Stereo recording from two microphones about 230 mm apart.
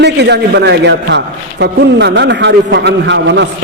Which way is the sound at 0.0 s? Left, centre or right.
Right.